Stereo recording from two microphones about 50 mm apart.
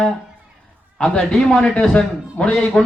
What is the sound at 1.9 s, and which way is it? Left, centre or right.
Speech, left.